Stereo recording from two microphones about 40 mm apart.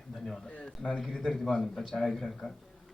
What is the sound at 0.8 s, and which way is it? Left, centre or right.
Speech, centre.